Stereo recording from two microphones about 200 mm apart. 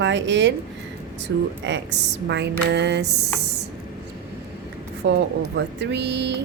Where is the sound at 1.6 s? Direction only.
60° right (ahead or behind).